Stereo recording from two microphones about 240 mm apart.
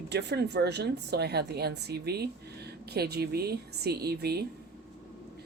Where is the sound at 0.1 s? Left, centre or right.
Right.